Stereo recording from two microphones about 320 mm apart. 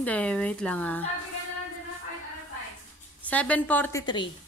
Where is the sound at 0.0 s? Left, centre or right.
Centre.